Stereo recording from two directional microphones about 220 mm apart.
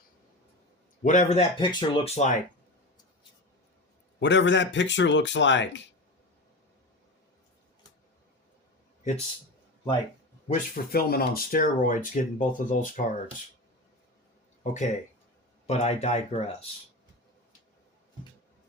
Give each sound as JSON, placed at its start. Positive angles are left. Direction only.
{"t": 1.0, "sound": "speech", "side_deg": 30}
{"t": 4.2, "sound": "speech", "side_deg": 55}
{"t": 10.5, "sound": "speech", "side_deg": 45}
{"t": 14.6, "sound": "speech", "side_deg": 35}